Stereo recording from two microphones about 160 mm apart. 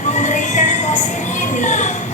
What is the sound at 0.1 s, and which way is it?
Music, 50° left (ahead or behind).